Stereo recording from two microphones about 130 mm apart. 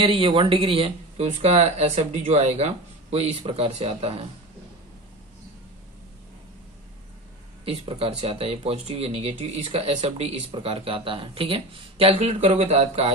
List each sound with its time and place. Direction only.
0.0 s speech: 45° right (ahead or behind)
7.6 s speech: 50° right (ahead or behind)